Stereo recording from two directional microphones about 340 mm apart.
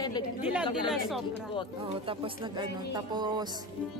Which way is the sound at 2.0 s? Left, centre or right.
Centre.